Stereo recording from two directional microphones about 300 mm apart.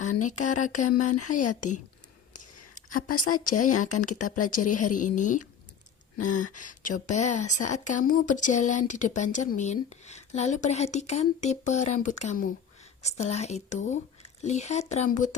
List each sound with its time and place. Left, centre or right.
0.2 s a sound: left
0.6 s a woman's voice: left
1.1 s speech: left
3.2 s a woman's voice: left